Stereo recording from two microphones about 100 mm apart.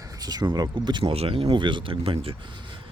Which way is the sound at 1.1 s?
75° right (ahead or behind).